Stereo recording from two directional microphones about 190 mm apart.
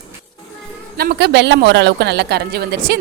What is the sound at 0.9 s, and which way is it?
A woman's voice, 55° right (ahead or behind).